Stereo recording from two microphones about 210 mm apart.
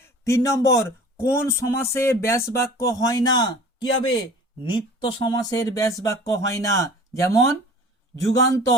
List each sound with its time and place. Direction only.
0.0 s speech: 15° left (ahead or behind)